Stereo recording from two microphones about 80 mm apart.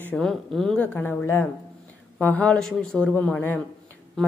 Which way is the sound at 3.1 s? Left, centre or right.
Left.